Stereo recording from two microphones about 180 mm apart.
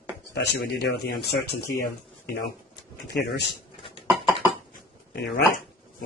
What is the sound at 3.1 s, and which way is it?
Speech, 65° left (ahead or behind).